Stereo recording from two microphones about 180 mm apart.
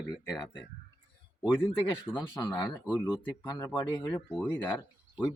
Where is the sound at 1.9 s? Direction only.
10° left (ahead or behind).